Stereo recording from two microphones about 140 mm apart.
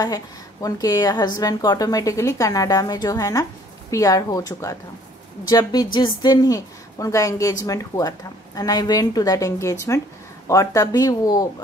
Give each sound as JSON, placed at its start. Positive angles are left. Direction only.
{"t": 0.0, "sound": "a woman's voice", "side_deg": 25}